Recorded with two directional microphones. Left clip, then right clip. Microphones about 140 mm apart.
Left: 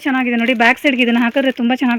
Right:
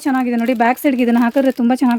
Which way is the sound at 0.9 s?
15° right (ahead or behind).